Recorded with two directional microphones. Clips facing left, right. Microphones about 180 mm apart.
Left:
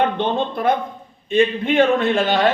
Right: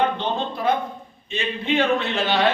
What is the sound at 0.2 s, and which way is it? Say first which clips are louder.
A man's voice: left 5 dB; 55° left (ahead or behind).